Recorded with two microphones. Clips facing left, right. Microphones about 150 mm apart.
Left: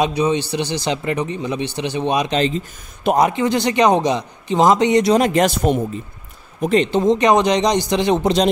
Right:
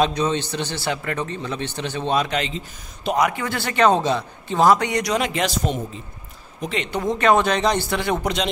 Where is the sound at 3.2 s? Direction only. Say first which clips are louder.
Left 5 dB; 25° left (ahead or behind).